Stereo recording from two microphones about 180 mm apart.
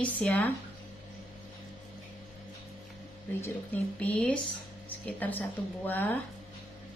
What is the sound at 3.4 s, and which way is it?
A woman's voice, 10° left (ahead or behind).